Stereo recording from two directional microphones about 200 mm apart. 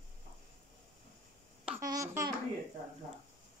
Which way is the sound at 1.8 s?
15° right (ahead or behind).